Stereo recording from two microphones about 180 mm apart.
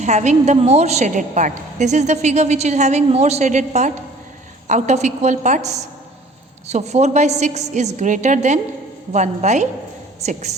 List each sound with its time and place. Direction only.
0.0 s a woman's voice: 40° right (ahead or behind)